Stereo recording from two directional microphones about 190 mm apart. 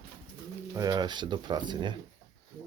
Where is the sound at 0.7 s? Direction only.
20° right (ahead or behind).